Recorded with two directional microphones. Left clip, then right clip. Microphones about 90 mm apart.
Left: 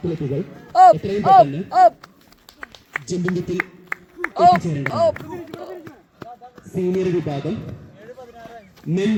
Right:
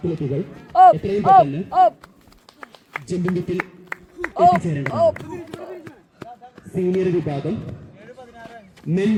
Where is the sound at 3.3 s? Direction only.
Centre (ahead or behind).